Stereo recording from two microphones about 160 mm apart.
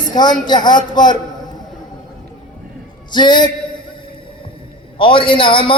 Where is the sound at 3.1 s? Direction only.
30° left (ahead or behind).